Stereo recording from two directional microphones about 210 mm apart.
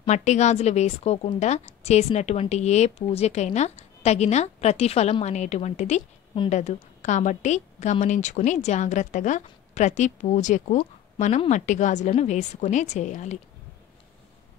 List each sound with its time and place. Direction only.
0.0 s a woman's voice: 35° left (ahead or behind)